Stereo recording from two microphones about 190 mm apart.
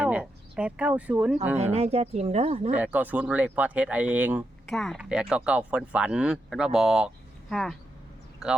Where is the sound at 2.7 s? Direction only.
10° right (ahead or behind).